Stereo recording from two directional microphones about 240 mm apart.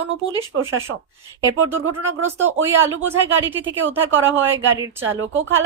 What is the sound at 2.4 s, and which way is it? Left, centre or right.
Speech, right.